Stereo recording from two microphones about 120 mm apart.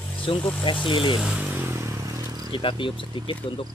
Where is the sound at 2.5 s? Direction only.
45° left (ahead or behind).